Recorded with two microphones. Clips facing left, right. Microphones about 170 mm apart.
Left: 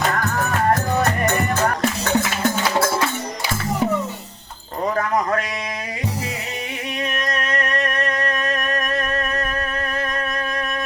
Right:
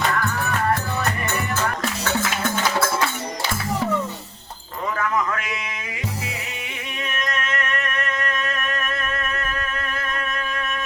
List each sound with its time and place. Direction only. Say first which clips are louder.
0.1 s music: left 2 dB; 45° left (ahead or behind)
4.9 s a sound: left 2 dB; 35° left (ahead or behind)
7.3 s music: left 3 dB; 35° left (ahead or behind)